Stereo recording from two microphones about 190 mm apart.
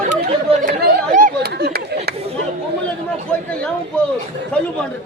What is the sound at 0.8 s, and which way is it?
Chatter, 45° right (ahead or behind).